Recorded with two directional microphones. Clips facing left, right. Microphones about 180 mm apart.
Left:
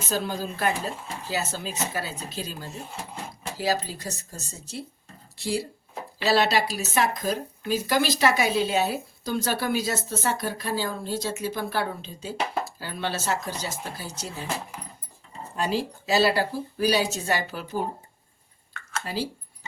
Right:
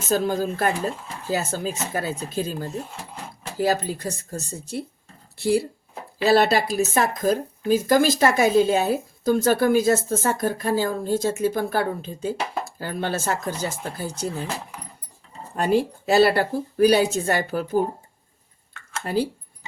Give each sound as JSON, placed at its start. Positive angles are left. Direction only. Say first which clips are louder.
{"t": 0.1, "sound": "a woman's voice", "louder": "right 7 dB", "side_deg": -50}
{"t": 15.5, "sound": "a woman's voice", "louder": "right 6 dB", "side_deg": -55}
{"t": 19.0, "sound": "speech", "louder": "right 8 dB", "side_deg": -55}